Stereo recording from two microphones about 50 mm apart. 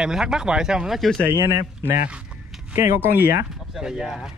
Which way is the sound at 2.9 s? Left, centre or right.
Right.